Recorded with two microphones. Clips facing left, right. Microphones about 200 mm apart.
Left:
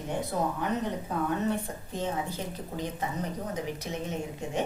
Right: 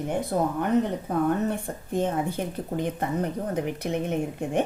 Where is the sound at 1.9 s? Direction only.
55° right (ahead or behind).